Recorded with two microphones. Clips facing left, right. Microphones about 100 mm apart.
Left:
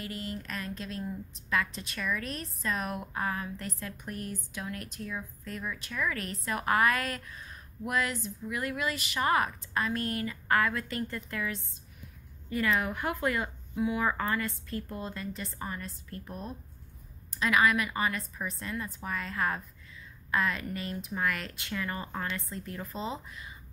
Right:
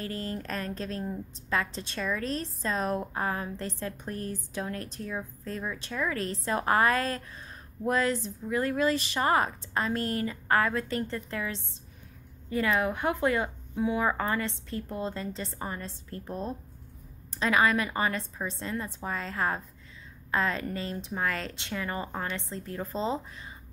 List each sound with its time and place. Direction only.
0.0 s a woman's voice: 35° right (ahead or behind)